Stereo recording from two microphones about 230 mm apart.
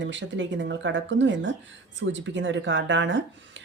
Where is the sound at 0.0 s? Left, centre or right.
Right.